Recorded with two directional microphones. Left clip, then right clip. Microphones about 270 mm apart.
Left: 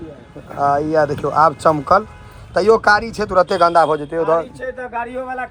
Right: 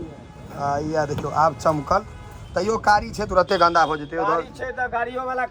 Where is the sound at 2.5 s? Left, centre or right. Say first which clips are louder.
Left 10 dB; right.